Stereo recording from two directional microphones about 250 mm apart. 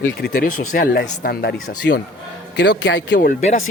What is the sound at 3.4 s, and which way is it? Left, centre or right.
Speech, left.